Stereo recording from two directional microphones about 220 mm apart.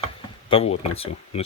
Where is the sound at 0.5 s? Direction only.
25° left (ahead or behind).